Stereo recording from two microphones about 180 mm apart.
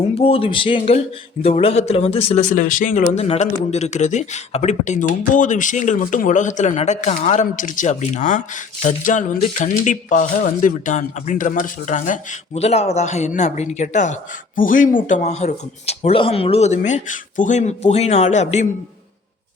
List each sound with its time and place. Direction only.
0.1 s speech: 35° left (ahead or behind)